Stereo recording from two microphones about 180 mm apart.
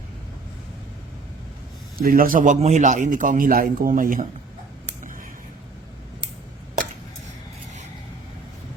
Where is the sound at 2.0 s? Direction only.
50° right (ahead or behind).